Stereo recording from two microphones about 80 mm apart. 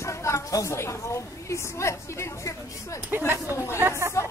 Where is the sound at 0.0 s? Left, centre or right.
Left.